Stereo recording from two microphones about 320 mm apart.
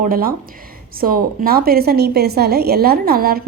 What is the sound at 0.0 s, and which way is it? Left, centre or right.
A woman's voice, right.